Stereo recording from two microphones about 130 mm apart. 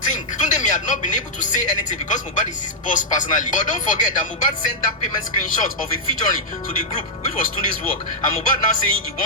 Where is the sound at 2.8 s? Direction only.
90° left.